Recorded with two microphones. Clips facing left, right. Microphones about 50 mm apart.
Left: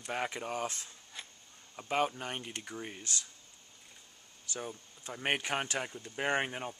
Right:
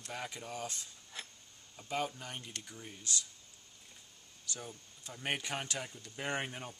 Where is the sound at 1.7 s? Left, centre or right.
Left.